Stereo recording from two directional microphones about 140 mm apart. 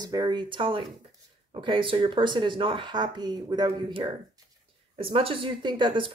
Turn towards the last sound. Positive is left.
turn(degrees=-35)  # may be behind; listen again after turning